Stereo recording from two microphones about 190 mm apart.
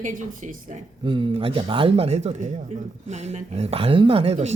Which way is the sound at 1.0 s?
25° right (ahead or behind).